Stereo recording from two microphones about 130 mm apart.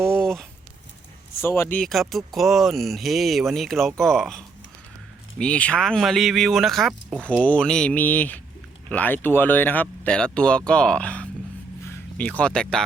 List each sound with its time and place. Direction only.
0.2 s a sound: 5° left (ahead or behind)
1.4 s speech: 20° left (ahead or behind)
1.8 s speech: centre (ahead or behind)
7.2 s speech: 10° left (ahead or behind)